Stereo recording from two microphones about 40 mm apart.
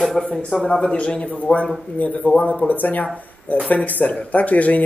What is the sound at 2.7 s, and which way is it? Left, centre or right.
Speech, left.